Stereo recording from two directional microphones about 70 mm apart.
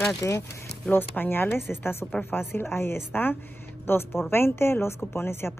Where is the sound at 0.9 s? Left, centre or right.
Left.